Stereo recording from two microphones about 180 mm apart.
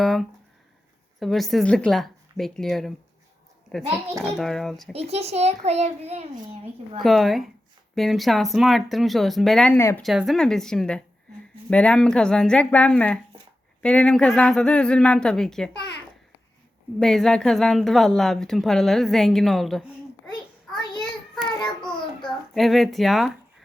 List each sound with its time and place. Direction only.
0.0 s a woman's voice: centre (ahead or behind)
4.9 s a child's voice: 35° right (ahead or behind)
7.0 s a woman's voice: centre (ahead or behind)
10.0 s a woman's voice: centre (ahead or behind)
17.0 s a woman's voice: centre (ahead or behind)
22.5 s a woman's voice: centre (ahead or behind)